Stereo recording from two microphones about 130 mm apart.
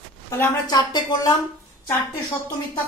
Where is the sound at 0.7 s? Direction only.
30° left (ahead or behind).